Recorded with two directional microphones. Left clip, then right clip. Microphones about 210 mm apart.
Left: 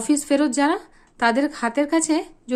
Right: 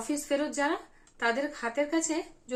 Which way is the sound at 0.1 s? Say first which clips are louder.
Left 11 dB; 50° left (ahead or behind).